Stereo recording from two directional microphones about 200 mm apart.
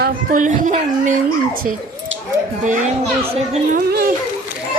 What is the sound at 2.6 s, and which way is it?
Speech, 40° right (ahead or behind).